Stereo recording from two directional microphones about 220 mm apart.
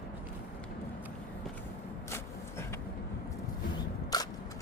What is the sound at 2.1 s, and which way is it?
Vehicle, 10° left (ahead or behind).